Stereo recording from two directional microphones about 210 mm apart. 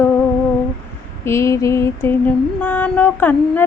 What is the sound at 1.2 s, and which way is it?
Mantra, 15° left (ahead or behind).